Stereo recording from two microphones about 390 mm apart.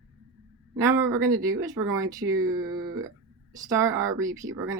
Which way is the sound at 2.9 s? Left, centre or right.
Right.